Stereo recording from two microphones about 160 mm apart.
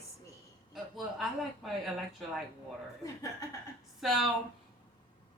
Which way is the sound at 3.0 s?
20° left (ahead or behind).